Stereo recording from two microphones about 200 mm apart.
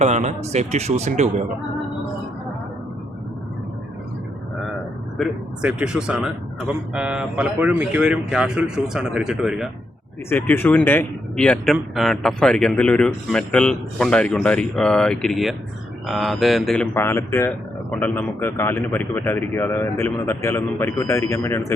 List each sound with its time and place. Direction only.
0.0 s speech: 35° right (ahead or behind)
5.1 s a man's voice: centre (ahead or behind)
10.2 s a man's voice: 10° left (ahead or behind)